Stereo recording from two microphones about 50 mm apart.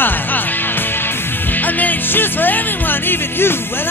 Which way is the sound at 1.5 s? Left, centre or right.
Left.